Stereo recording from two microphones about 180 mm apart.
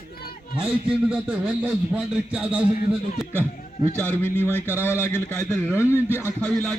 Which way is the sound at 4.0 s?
10° left (ahead or behind).